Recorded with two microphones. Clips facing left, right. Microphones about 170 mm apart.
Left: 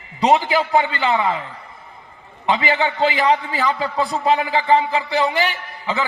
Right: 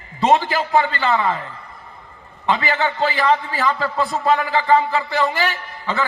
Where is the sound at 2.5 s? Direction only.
20° left (ahead or behind).